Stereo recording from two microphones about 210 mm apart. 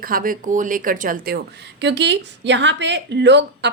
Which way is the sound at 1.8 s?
55° right (ahead or behind).